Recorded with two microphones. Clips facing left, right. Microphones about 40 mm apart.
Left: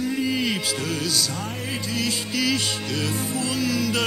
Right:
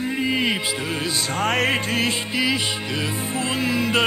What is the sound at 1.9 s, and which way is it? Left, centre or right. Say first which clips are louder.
Music: right 4 dB; right.